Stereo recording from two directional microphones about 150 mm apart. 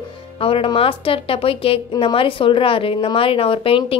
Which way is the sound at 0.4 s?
35° left (ahead or behind).